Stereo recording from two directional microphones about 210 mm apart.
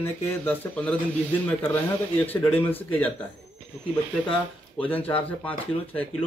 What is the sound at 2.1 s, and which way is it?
Speech, 10° left (ahead or behind).